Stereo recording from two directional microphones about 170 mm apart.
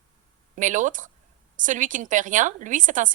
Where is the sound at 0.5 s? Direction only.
50° right (ahead or behind).